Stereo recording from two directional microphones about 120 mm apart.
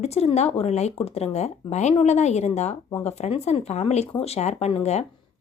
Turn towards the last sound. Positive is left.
turn(degrees=60)  # may be behind; listen again after turning